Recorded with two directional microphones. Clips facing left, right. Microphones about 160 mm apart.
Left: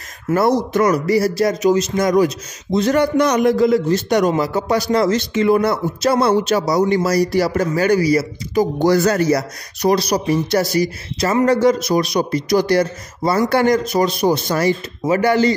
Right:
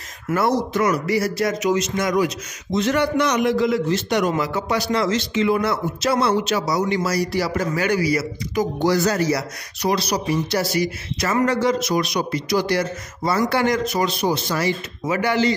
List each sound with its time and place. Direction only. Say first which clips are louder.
0.7 s a man's voice: left 5 dB; 40° left (ahead or behind)
8.8 s a man's voice: left 4 dB; 55° left (ahead or behind)